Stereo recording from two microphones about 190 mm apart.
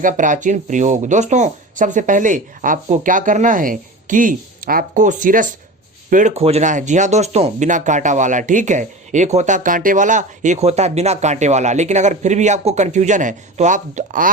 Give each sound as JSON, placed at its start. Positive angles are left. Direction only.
{"t": 0.0, "sound": "speech", "side_deg": -40}